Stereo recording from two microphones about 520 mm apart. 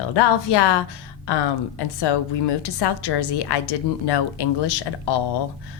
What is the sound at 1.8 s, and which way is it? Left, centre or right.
Speech, left.